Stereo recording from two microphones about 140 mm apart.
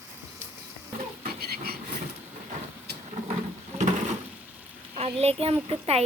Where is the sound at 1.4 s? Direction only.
90° right.